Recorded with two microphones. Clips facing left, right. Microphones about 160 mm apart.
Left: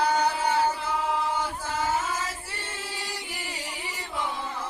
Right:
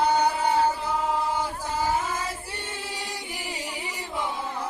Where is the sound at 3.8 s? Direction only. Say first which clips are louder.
Even; 15° right (ahead or behind).